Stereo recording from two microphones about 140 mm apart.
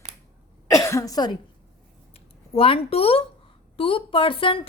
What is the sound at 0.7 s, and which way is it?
Speech, 20° left (ahead or behind).